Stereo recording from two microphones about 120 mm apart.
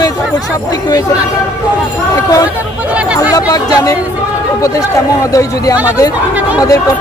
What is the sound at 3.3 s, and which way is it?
Speech, 35° left (ahead or behind).